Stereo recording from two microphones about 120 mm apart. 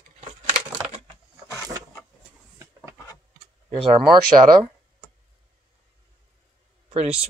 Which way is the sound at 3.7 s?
40° right (ahead or behind).